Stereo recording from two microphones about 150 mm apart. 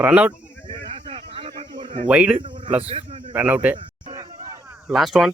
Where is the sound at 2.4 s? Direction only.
35° right (ahead or behind).